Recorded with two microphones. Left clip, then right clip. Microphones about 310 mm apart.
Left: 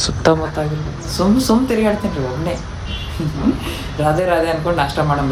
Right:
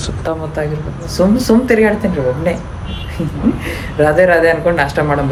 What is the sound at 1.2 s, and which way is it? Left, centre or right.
Speech, centre.